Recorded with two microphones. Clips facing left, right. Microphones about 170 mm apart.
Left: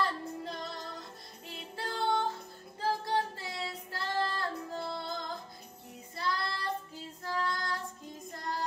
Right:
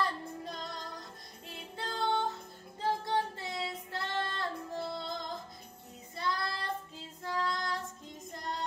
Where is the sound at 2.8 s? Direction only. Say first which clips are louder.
Even; 25° right (ahead or behind).